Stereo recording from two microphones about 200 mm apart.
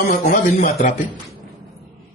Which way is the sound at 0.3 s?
40° left (ahead or behind).